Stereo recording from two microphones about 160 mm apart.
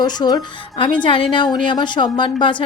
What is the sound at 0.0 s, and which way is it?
A woman's voice, 25° left (ahead or behind).